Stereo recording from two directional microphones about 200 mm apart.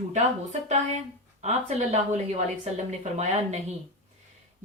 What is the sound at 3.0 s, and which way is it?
Speech, 35° right (ahead or behind).